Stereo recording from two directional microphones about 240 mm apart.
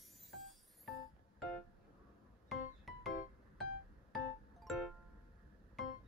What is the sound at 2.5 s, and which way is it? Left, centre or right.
Music, centre.